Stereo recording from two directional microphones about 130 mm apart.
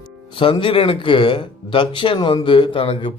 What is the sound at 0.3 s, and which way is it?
Speech, 45° left (ahead or behind).